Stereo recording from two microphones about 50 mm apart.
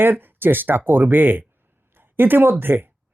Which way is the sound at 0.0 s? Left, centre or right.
Right.